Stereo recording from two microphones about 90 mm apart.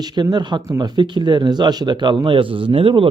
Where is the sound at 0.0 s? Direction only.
50° right (ahead or behind).